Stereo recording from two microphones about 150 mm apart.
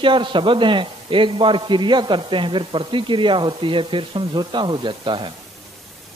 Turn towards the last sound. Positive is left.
turn(degrees=-35)  # may be behind; listen again after turning